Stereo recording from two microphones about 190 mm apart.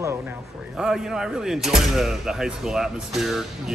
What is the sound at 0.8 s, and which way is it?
Speech, 5° right (ahead or behind).